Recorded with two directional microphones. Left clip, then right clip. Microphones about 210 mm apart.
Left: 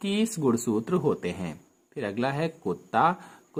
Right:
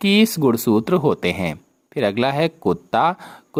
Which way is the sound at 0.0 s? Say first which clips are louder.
Right 10 dB; 40° right (ahead or behind).